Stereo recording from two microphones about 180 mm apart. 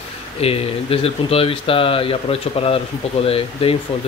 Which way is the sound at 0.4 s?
35° left (ahead or behind).